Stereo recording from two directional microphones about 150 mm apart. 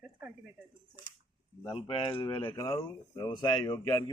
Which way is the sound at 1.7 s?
35° left (ahead or behind).